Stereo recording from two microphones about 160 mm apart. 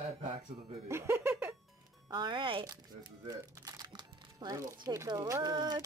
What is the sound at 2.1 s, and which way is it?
Speech, 30° right (ahead or behind).